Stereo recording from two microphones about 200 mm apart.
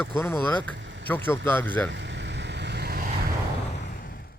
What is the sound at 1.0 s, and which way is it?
Speech, 10° left (ahead or behind).